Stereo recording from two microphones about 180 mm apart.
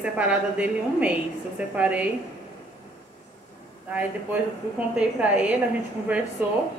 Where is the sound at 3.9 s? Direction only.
10° right (ahead or behind).